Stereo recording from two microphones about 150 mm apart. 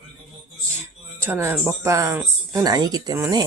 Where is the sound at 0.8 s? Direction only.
15° right (ahead or behind).